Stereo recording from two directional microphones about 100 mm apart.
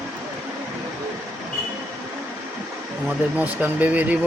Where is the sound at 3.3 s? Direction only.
15° right (ahead or behind).